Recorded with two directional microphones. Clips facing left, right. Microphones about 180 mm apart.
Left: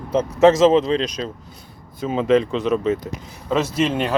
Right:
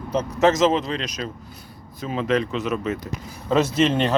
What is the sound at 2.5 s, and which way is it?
Speech, 5° right (ahead or behind).